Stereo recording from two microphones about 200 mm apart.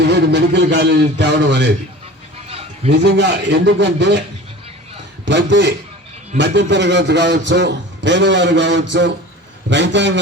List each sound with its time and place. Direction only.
0.0 s a man's voice: 60° right (ahead or behind)
2.5 s a sound: 30° right (ahead or behind)
3.0 s a man's voice: 60° right (ahead or behind)
5.2 s a man's voice: 60° right (ahead or behind)